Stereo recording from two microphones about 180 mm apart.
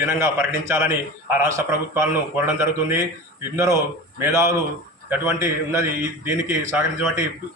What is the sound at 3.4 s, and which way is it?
Speech, 15° right (ahead or behind).